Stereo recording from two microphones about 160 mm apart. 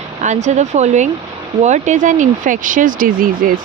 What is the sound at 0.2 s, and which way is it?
Speech, 50° right (ahead or behind).